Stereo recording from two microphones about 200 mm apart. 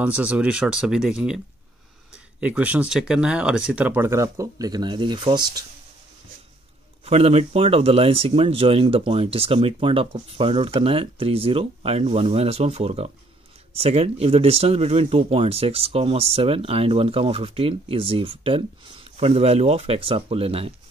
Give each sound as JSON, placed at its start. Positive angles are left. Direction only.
{"t": 0.0, "sound": "speech", "side_deg": -5}
{"t": 2.4, "sound": "speech", "side_deg": -5}
{"t": 7.1, "sound": "speech", "side_deg": -30}